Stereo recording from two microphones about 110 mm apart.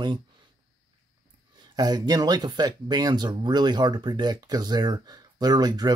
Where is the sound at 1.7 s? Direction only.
40° right (ahead or behind).